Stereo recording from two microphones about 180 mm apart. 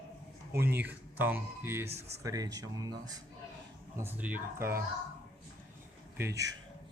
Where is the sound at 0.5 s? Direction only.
10° right (ahead or behind).